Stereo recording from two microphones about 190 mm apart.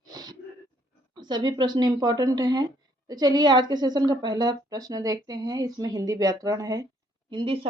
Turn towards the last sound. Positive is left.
turn(degrees=-25)  # may be behind; listen again after turning